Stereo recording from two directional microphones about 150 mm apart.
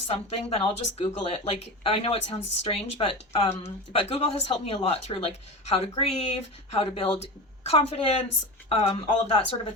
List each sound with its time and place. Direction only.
0.1 s a woman's voice: 45° left (ahead or behind)